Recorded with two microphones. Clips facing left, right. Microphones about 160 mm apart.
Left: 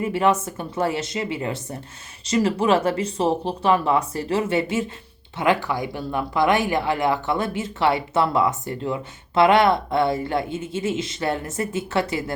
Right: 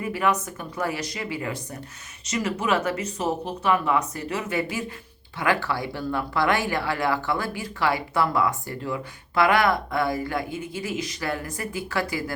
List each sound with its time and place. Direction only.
0.0 s speech: 25° left (ahead or behind)